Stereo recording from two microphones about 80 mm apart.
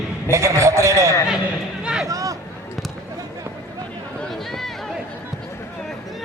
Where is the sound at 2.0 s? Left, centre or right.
Right.